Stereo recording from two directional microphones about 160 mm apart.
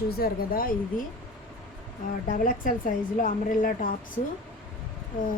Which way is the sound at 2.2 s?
55° left (ahead or behind).